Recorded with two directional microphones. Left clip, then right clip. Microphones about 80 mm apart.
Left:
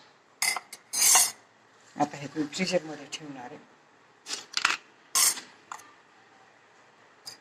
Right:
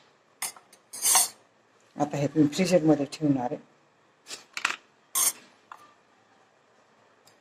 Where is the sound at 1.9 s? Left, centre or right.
Right.